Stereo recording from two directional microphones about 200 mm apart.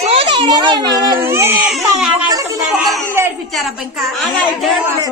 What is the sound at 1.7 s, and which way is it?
Speech, centre (ahead or behind).